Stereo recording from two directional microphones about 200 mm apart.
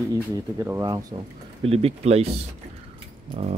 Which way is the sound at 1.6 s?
30° right (ahead or behind).